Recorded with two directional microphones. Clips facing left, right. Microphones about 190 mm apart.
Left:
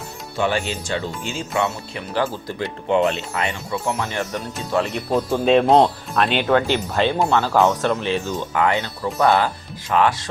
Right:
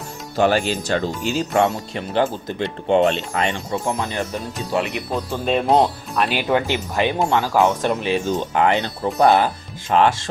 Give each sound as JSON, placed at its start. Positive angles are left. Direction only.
{"t": 0.3, "sound": "speech", "side_deg": -40}
{"t": 2.1, "sound": "speech", "side_deg": -25}
{"t": 3.8, "sound": "speech", "side_deg": -20}
{"t": 5.1, "sound": "speech", "side_deg": 0}
{"t": 8.5, "sound": "speech", "side_deg": -25}